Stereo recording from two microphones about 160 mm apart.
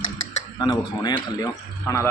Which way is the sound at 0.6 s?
25° left (ahead or behind).